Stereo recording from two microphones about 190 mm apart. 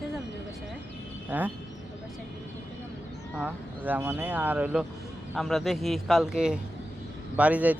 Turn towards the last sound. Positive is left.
turn(degrees=-5)  # may be behind; listen again after turning